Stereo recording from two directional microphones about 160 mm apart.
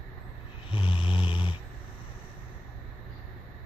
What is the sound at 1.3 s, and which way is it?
Dog, 35° left (ahead or behind).